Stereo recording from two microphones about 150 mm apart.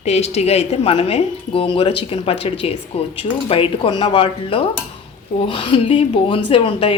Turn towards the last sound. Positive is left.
turn(degrees=40)  # may be behind; listen again after turning